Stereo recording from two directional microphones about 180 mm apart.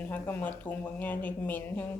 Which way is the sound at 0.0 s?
10° left (ahead or behind).